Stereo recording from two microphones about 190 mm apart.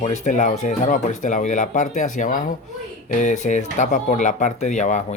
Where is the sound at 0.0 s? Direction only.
40° left (ahead or behind).